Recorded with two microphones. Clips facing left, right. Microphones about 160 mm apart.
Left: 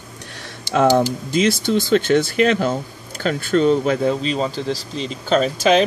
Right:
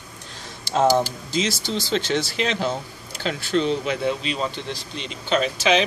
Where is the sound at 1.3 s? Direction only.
55° left (ahead or behind).